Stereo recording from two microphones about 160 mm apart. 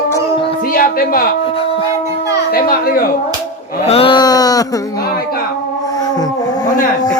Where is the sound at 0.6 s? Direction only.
65° left (ahead or behind).